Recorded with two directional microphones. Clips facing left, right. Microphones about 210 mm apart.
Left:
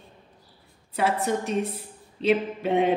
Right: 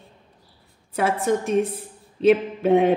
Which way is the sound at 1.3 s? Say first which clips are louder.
Right 5 dB; 50° right (ahead or behind).